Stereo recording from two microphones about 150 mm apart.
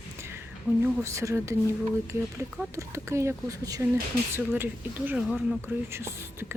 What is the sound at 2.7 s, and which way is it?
Speech, 20° right (ahead or behind).